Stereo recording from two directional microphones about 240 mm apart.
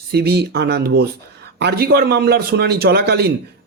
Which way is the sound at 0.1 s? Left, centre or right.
Right.